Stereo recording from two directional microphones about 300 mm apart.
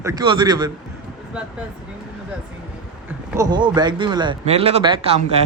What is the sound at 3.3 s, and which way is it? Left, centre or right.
Speech, centre.